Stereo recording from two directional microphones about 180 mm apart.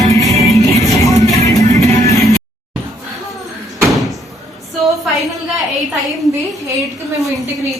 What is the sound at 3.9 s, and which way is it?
Door, centre (ahead or behind).